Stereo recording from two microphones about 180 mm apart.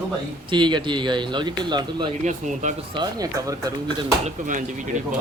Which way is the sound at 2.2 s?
40° right (ahead or behind).